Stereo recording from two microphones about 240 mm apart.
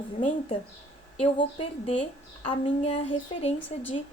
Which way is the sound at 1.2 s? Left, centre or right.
Left.